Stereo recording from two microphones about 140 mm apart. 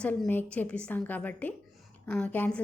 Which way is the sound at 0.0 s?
10° left (ahead or behind).